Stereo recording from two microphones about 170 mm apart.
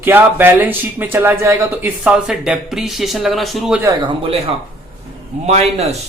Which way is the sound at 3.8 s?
25° right (ahead or behind).